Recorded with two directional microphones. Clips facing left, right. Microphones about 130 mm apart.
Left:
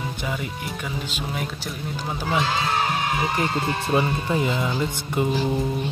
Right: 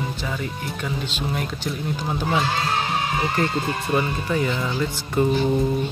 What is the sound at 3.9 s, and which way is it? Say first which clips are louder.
Speech: left 1 dB; 20° left (ahead or behind).